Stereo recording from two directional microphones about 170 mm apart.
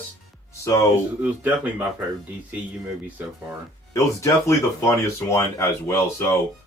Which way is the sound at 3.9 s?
15° left (ahead or behind).